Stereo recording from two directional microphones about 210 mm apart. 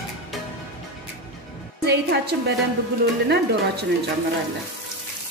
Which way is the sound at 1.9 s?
50° right (ahead or behind).